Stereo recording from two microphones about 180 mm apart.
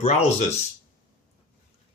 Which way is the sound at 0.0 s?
35° left (ahead or behind).